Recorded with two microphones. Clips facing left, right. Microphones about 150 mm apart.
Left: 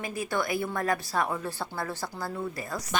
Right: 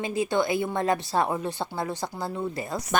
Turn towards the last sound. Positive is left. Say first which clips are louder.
# right 5 dB
turn(degrees=-50)  # may be behind; listen again after turning